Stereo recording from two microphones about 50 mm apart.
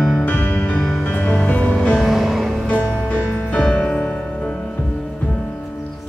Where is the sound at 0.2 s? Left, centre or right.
Left.